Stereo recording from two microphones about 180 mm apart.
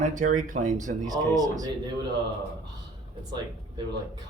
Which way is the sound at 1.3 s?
20° right (ahead or behind).